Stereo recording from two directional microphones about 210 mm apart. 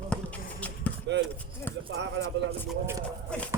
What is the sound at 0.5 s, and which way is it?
Basketball bounce, 5° left (ahead or behind).